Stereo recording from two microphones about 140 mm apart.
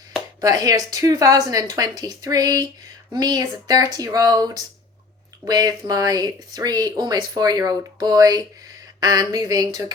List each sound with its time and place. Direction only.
0.4 s speech: 25° right (ahead or behind)